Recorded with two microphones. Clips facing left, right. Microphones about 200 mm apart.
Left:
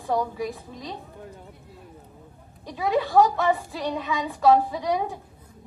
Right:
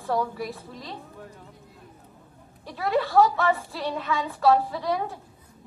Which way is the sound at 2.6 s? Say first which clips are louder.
Left 1 dB; 15° left (ahead or behind).